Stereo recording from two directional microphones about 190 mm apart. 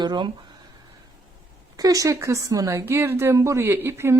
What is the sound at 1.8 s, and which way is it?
A woman's voice, 20° right (ahead or behind).